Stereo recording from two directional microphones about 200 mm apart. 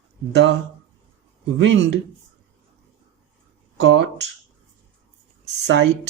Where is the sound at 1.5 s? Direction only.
60° right (ahead or behind).